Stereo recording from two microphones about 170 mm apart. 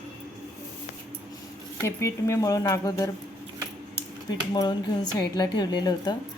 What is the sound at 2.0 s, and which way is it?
Speech, 15° left (ahead or behind).